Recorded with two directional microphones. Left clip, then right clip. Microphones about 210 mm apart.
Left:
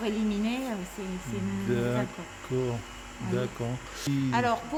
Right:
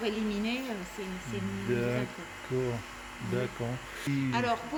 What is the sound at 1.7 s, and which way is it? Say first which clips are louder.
Speech: left 1 dB; 10° left (ahead or behind).